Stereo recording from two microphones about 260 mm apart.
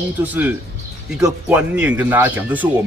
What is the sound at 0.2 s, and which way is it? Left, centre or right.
Speech, centre.